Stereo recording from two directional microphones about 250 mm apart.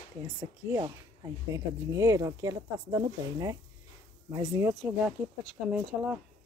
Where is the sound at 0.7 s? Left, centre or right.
Centre.